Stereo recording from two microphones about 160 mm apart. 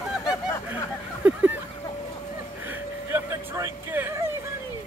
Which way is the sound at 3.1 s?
15° right (ahead or behind).